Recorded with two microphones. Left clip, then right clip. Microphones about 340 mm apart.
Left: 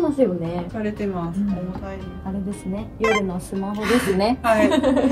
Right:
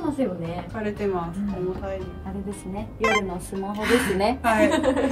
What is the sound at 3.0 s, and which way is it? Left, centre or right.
Speech, centre.